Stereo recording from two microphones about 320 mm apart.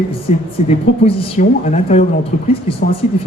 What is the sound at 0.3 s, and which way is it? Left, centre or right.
A woman's voice, left.